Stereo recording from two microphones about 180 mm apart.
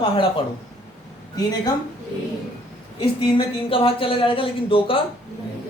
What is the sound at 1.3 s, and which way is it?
Speech, 20° left (ahead or behind).